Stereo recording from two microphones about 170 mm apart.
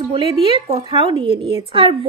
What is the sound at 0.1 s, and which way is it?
Speech, 35° right (ahead or behind).